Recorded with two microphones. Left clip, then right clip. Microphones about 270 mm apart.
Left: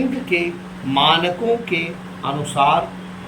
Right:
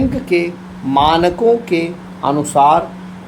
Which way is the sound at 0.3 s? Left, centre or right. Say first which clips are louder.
Right 4 dB; centre.